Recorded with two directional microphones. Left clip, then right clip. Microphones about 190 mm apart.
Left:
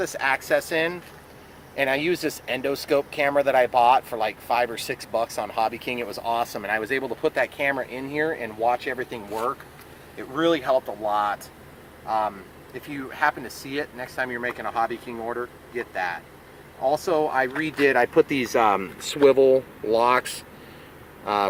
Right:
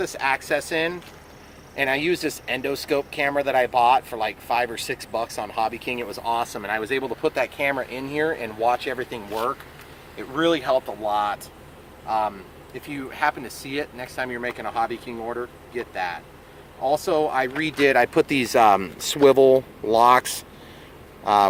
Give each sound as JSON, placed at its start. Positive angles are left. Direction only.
{"t": 0.0, "sound": "speech", "side_deg": 20}